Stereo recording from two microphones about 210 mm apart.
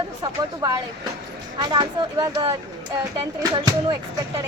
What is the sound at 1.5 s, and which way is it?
Speech, 20° right (ahead or behind).